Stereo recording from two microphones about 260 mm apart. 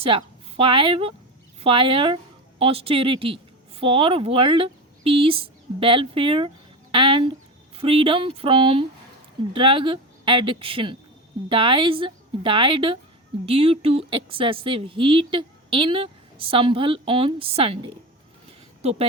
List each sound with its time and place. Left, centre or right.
0.0 s a woman's voice: centre